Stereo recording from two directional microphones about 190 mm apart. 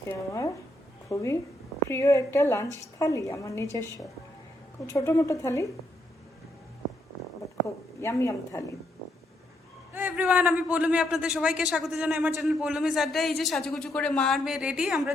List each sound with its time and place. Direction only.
0.1 s a woman's voice: 15° left (ahead or behind)
8.0 s a woman's voice: 15° left (ahead or behind)
9.9 s a man's voice: 10° right (ahead or behind)